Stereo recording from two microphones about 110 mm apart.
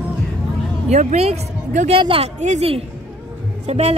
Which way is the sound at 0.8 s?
80° right.